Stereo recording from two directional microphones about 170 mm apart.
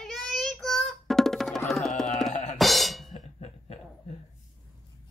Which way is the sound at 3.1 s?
40° left (ahead or behind).